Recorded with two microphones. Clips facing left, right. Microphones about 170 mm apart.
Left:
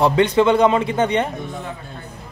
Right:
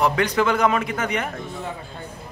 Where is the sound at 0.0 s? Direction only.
30° left (ahead or behind).